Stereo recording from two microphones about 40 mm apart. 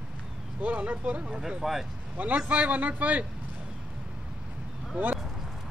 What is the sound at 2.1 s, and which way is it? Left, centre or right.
A man's voice, right.